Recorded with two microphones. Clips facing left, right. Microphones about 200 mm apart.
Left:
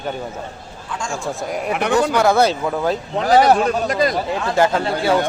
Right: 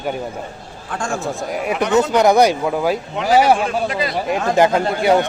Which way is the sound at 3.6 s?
40° left (ahead or behind).